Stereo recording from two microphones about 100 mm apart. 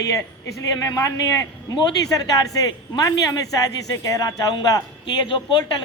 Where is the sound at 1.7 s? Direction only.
45° left (ahead or behind).